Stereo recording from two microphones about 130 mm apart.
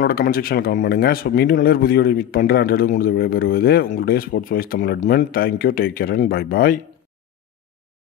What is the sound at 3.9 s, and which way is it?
Speech, 90° left.